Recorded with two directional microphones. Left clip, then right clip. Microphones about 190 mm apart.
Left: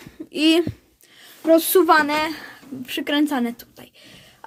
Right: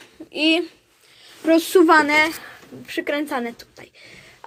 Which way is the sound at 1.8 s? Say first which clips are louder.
Right 2 dB; 15° left (ahead or behind).